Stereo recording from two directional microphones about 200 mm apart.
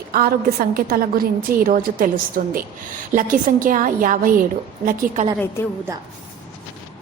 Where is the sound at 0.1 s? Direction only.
50° right (ahead or behind).